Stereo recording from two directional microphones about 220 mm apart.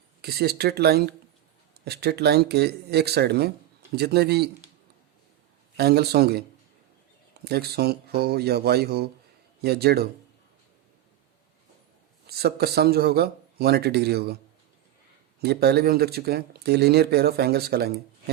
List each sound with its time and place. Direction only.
0.2 s speech: 45° right (ahead or behind)
5.7 s speech: 45° right (ahead or behind)
7.4 s speech: 45° right (ahead or behind)
12.3 s speech: 45° right (ahead or behind)
15.4 s speech: 45° right (ahead or behind)